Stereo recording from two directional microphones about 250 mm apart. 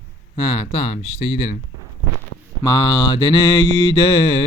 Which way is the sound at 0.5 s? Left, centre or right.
Left.